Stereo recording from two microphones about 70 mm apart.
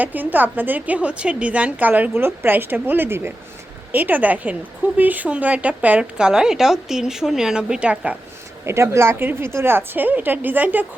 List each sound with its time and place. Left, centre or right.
0.0 s a woman's voice: right
8.6 s speech: right